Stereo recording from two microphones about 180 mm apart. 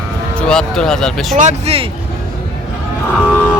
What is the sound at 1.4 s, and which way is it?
Speech, 40° right (ahead or behind).